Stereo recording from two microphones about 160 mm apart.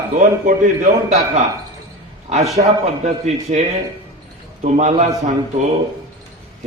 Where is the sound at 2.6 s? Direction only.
55° right (ahead or behind).